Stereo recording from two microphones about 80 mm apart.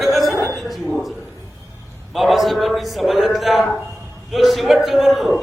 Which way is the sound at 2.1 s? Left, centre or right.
Centre.